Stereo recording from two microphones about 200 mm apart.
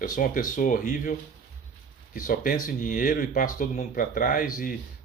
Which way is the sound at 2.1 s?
45° left (ahead or behind).